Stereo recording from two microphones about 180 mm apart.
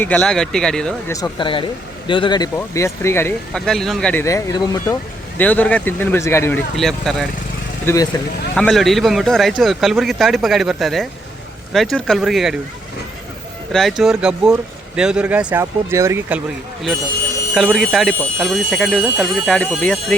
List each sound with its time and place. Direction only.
0.0 s a man's voice: 5° left (ahead or behind)
1.1 s speech: 25° left (ahead or behind)
3.7 s speech: centre (ahead or behind); by 4.8 s 20° left (ahead or behind)
5.4 s speech: 10° left (ahead or behind)
6.7 s a man's voice: centre (ahead or behind)
7.9 s speech: 15° left (ahead or behind)
8.5 s a man's voice: 5° left (ahead or behind)
13.7 s a man's voice: centre (ahead or behind)
17.5 s a man's voice: centre (ahead or behind)